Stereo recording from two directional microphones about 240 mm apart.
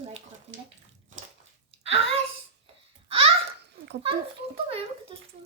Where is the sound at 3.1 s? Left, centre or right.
Right.